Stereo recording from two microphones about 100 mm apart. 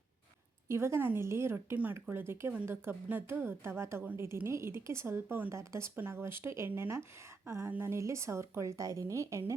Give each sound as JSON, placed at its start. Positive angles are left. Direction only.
{"t": 0.7, "sound": "a woman's voice", "side_deg": -25}